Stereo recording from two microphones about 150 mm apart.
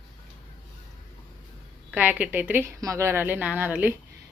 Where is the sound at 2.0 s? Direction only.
10° right (ahead or behind).